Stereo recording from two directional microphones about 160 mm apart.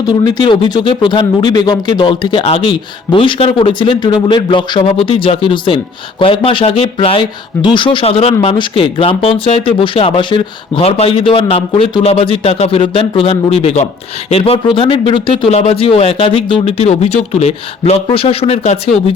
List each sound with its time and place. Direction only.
0.0 s speech: 25° left (ahead or behind); by 19.0 s 40° left (ahead or behind)